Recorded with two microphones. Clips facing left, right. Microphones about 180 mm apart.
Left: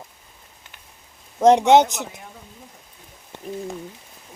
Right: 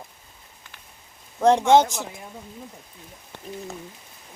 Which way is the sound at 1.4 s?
20° left (ahead or behind).